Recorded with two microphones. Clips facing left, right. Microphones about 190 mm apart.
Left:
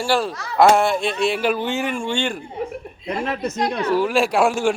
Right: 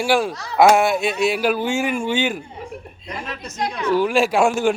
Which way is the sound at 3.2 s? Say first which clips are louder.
Left 4 dB; 60° left (ahead or behind).